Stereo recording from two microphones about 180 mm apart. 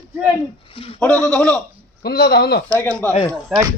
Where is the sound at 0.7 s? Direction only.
30° left (ahead or behind).